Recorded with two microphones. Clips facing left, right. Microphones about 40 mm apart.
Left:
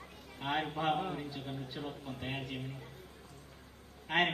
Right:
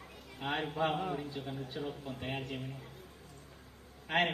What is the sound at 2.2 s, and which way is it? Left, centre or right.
Speech, centre.